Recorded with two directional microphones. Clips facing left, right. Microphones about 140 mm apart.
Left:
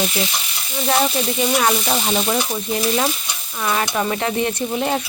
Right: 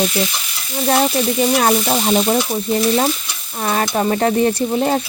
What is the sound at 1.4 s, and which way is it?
Stir, 35° right (ahead or behind).